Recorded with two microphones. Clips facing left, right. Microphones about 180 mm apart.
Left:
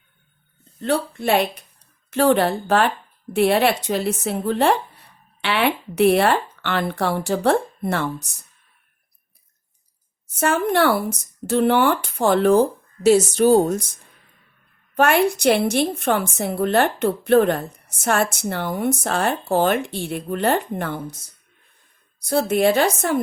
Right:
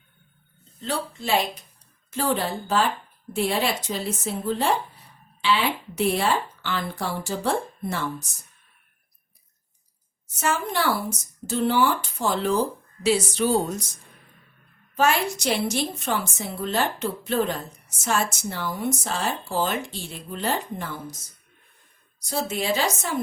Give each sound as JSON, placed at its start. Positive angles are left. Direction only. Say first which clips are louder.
{"t": 0.8, "sound": "a woman's voice", "louder": "left 7 dB", "side_deg": 60}
{"t": 10.3, "sound": "a woman's voice", "louder": "left 7 dB", "side_deg": 60}
{"t": 14.9, "sound": "a woman's voice", "louder": "left 5 dB", "side_deg": 60}
{"t": 22.2, "sound": "a woman's voice", "louder": "left 10 dB", "side_deg": 60}